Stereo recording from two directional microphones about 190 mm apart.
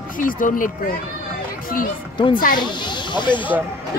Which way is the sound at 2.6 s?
25° left (ahead or behind).